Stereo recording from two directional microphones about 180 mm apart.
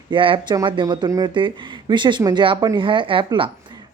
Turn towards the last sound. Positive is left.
turn(degrees=-30)  # may be behind; listen again after turning